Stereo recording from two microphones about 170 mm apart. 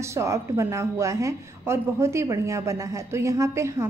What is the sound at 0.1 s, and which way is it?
A woman's voice, 15° right (ahead or behind).